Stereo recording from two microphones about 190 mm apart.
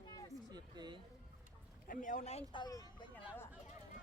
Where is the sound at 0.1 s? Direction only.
20° left (ahead or behind).